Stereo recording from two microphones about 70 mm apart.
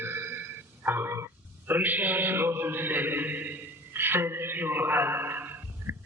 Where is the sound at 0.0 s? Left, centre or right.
Right.